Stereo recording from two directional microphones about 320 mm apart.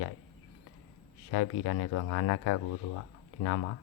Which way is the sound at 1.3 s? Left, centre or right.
Left.